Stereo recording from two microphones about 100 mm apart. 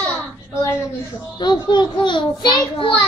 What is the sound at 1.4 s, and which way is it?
A child's voice, 50° left (ahead or behind).